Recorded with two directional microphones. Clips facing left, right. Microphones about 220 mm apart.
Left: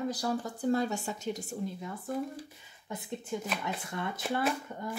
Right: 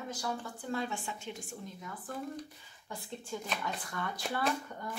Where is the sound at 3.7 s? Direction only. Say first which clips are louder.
Left 3 dB; 25° left (ahead or behind).